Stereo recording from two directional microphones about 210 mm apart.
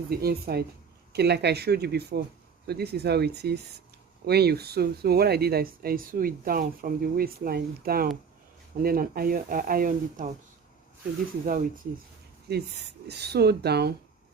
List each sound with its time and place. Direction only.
0.1 s speech: 45° right (ahead or behind)
11.4 s speech: 40° right (ahead or behind)
12.5 s speech: 50° right (ahead or behind)